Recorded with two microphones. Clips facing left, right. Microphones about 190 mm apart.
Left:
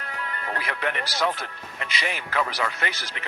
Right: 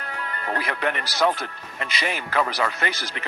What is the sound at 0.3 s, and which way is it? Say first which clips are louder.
Speech: right 4 dB; 40° right (ahead or behind).